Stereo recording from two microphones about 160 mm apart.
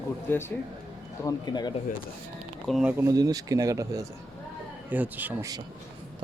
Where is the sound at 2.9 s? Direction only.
20° right (ahead or behind).